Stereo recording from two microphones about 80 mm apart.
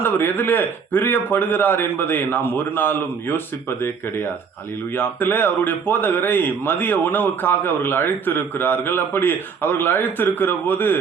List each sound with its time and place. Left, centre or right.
0.0 s speech: left